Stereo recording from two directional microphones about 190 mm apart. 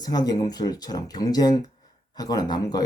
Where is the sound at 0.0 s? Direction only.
20° left (ahead or behind).